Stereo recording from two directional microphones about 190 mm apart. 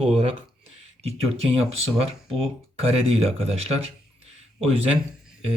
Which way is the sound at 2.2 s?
Centre (ahead or behind).